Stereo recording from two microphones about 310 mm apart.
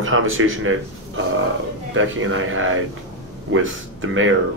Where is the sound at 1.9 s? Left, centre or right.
Right.